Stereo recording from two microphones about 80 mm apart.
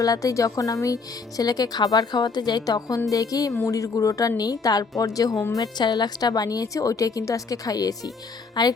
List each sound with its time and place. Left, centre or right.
0.0 s a woman's voice: left
5.5 s speech: left
8.6 s a woman's voice: left